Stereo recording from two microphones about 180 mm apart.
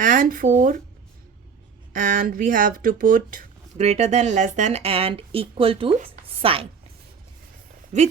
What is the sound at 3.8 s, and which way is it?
A woman's voice, 35° right (ahead or behind).